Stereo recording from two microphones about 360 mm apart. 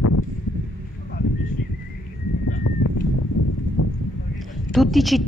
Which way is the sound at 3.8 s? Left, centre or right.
Left.